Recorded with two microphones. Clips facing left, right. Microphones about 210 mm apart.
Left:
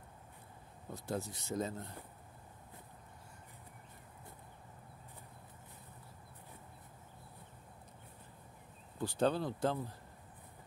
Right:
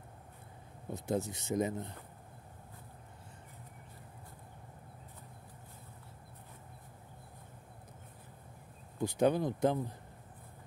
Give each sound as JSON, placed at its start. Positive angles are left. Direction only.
{"t": 0.8, "sound": "speech", "side_deg": -20}
{"t": 9.0, "sound": "speech", "side_deg": -15}